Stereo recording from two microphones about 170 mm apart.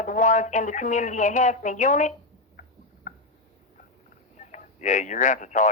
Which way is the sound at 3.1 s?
45° left (ahead or behind).